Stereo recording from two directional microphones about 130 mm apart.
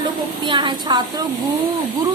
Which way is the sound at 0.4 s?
40° right (ahead or behind).